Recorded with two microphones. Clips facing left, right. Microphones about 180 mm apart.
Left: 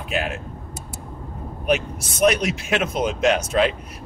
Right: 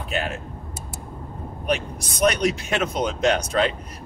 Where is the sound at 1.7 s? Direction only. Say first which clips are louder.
Left 3 dB; 5° left (ahead or behind).